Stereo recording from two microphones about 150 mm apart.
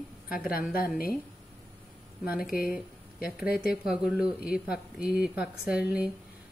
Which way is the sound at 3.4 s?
90° left.